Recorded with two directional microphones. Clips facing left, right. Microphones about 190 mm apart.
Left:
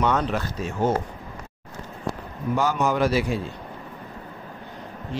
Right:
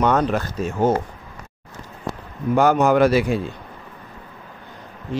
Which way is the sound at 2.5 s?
55° right (ahead or behind).